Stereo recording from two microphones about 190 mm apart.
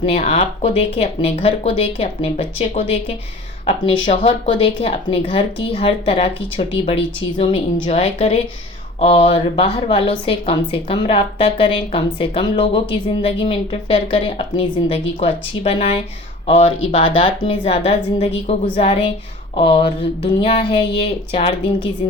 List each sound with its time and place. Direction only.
0.0 s a woman's voice: 30° left (ahead or behind)